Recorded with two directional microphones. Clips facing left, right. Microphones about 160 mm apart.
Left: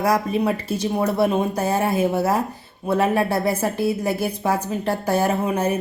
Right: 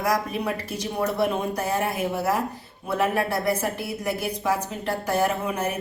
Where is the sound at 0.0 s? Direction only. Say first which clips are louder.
Left 5 dB; 25° left (ahead or behind).